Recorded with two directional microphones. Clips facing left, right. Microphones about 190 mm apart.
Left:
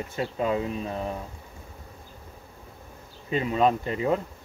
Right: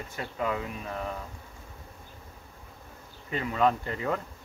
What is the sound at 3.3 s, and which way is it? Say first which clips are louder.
Speech: left 3 dB; 20° left (ahead or behind).